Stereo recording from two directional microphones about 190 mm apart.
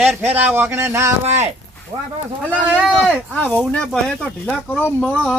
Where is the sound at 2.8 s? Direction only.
5° left (ahead or behind).